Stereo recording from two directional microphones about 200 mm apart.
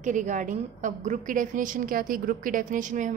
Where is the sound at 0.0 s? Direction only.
40° right (ahead or behind).